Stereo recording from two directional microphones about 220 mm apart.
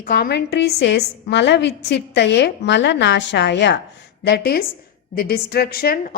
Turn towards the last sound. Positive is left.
turn(degrees=45)  # may be behind; listen again after turning